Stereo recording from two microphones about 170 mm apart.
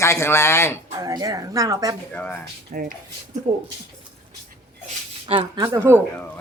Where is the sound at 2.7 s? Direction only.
50° right (ahead or behind).